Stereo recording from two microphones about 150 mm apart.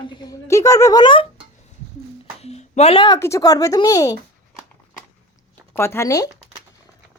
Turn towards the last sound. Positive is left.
turn(degrees=20)  # may be behind; listen again after turning